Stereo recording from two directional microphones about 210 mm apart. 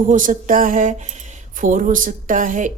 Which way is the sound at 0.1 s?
40° right (ahead or behind).